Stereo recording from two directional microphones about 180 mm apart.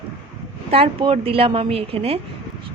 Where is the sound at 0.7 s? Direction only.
30° right (ahead or behind).